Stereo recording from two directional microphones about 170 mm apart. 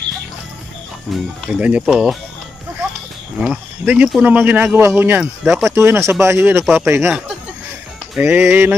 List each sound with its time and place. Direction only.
1.1 s speech: 5° right (ahead or behind)
3.3 s speech: 5° right (ahead or behind)
5.4 s speech: centre (ahead or behind)
5.7 s speech: 15° right (ahead or behind)
8.2 s speech: 15° right (ahead or behind)